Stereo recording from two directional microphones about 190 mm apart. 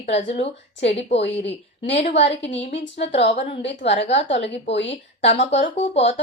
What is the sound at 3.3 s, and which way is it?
Speech, 35° left (ahead or behind).